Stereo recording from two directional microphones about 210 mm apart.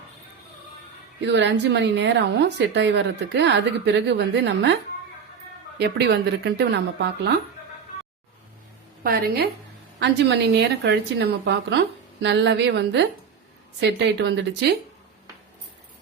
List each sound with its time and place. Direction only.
1.2 s a woman's voice: 55° right (ahead or behind)
9.0 s a woman's voice: 45° right (ahead or behind)
14.2 s a woman's voice: 55° right (ahead or behind)